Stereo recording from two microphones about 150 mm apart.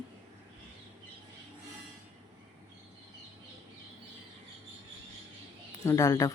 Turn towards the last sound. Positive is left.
turn(degrees=20)  # may be behind; listen again after turning